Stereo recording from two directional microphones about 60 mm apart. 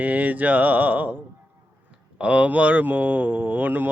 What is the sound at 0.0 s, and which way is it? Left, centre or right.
Speech, right.